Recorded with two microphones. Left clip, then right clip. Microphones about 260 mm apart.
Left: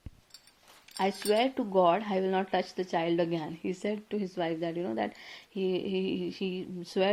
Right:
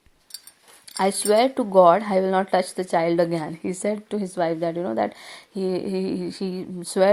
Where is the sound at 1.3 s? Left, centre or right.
Right.